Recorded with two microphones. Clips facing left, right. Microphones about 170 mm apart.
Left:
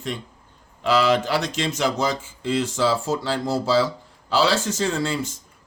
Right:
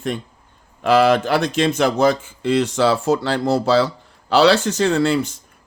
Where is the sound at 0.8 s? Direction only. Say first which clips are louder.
Right 5 dB; 55° right (ahead or behind).